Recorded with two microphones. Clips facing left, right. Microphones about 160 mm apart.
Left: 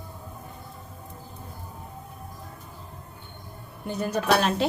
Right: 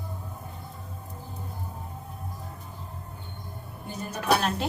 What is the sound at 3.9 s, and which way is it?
Speech, 70° left (ahead or behind).